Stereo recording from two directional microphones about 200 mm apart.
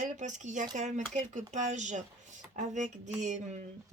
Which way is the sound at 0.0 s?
40° right (ahead or behind).